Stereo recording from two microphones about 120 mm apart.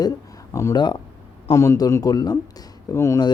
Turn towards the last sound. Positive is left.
turn(degrees=25)  # may be behind; listen again after turning